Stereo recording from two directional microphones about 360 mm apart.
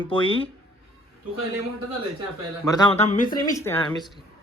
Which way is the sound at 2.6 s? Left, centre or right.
Centre.